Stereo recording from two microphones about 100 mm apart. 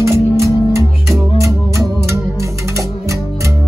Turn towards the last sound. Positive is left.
turn(degrees=-30)  # may be behind; listen again after turning